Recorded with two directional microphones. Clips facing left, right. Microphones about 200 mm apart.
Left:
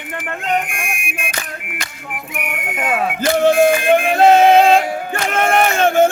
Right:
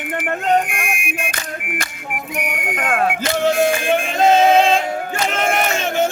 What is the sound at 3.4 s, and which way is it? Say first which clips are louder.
Music: left 4 dB; 55° left (ahead or behind).